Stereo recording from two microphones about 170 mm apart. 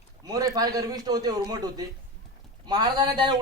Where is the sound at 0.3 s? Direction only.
20° right (ahead or behind).